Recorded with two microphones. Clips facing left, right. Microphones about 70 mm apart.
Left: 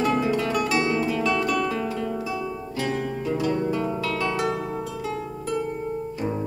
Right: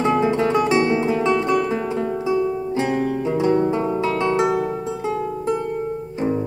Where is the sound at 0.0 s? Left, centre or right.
Right.